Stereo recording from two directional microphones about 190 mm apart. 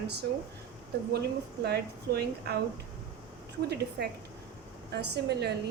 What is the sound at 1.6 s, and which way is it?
Speech, 55° right (ahead or behind).